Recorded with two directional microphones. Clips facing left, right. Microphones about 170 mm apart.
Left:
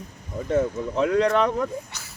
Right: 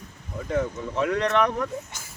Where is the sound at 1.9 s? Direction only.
45° right (ahead or behind).